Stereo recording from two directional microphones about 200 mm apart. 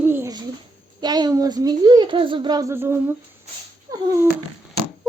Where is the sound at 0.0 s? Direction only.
10° right (ahead or behind).